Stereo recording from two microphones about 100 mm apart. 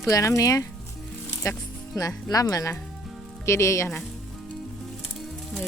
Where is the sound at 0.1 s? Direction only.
35° left (ahead or behind).